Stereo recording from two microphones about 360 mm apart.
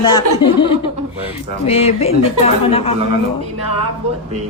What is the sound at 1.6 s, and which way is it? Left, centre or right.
Speech, centre.